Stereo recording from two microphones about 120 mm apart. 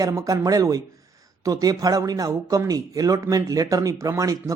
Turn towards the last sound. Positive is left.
turn(degrees=-30)  # may be behind; listen again after turning